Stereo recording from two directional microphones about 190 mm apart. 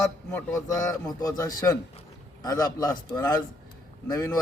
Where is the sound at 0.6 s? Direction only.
20° left (ahead or behind).